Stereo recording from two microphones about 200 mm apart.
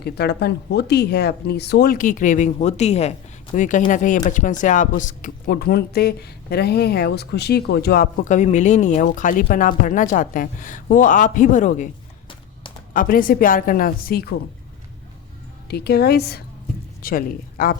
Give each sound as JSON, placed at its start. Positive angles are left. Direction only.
{"t": 0.0, "sound": "speech", "side_deg": 55}
{"t": 8.2, "sound": "speech", "side_deg": 35}
{"t": 12.9, "sound": "speech", "side_deg": 45}
{"t": 15.7, "sound": "speech", "side_deg": 55}